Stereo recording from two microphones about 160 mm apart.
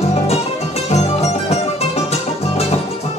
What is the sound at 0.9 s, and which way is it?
Music, 40° left (ahead or behind).